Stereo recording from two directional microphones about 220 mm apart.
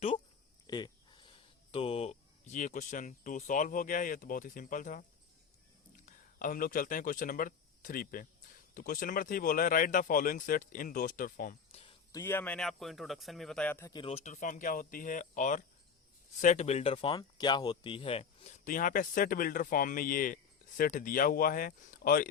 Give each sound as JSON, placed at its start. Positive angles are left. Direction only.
{"t": 0.7, "sound": "speech", "side_deg": 20}
{"t": 6.1, "sound": "speech", "side_deg": 40}
{"t": 12.1, "sound": "speech", "side_deg": 10}